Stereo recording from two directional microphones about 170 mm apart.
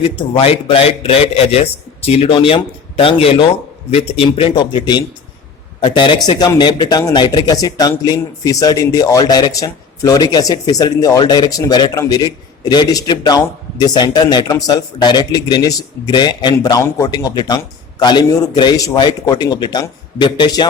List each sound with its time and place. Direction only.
0.0 s a man's voice: 35° left (ahead or behind)